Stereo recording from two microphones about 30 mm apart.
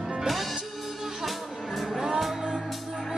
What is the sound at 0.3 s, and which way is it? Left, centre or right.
Music, centre.